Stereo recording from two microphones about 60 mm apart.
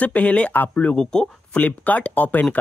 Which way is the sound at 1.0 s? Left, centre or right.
Centre.